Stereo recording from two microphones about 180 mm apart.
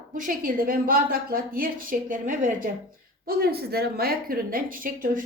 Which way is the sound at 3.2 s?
60° right (ahead or behind).